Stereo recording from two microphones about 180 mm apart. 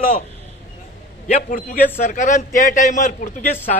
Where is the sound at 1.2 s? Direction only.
50° left (ahead or behind).